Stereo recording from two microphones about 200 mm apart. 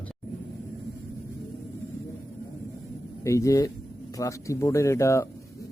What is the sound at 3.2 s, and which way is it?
A man's voice, 15° left (ahead or behind).